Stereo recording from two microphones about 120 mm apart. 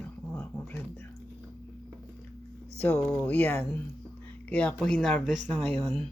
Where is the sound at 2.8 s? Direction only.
5° left (ahead or behind).